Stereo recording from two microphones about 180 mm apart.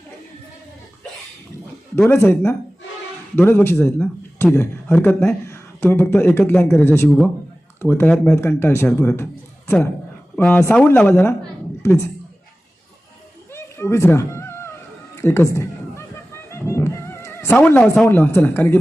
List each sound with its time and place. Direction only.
2.0 s a man's voice: 10° left (ahead or behind)
13.5 s music: 15° left (ahead or behind)